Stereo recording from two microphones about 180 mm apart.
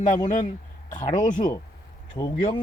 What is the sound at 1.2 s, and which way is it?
Speech, 45° left (ahead or behind).